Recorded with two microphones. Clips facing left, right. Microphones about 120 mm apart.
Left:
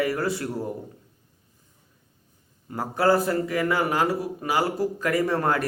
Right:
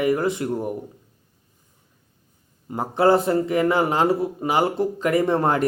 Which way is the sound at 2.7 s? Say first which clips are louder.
Right 4 dB; 20° right (ahead or behind).